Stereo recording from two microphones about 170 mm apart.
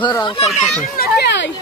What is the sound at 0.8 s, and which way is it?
Children playing, 60° left (ahead or behind).